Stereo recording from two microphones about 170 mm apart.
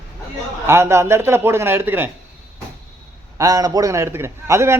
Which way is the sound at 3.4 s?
20° right (ahead or behind).